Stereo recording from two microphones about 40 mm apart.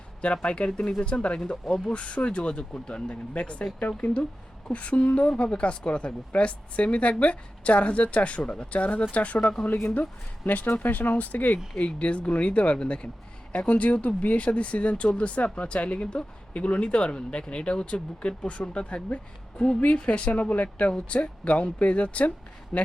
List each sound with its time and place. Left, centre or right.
0.4 s speech: left
1.6 s speech: centre
1.9 s speech: left
11.8 s speech: left